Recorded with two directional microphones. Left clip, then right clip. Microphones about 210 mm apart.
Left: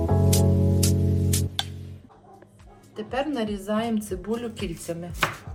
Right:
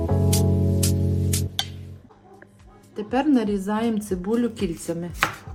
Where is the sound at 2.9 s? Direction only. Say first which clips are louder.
Right 5 dB; 55° right (ahead or behind).